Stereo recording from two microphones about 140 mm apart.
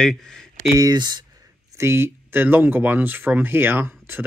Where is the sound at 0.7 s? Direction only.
25° right (ahead or behind).